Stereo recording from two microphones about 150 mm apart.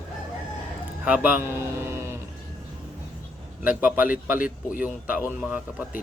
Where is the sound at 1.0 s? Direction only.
10° right (ahead or behind).